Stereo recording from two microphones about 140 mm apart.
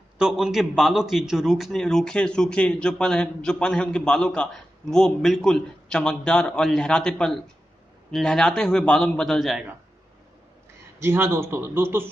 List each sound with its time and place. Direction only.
0.2 s a man's voice: 5° right (ahead or behind)
11.0 s speech: 20° right (ahead or behind)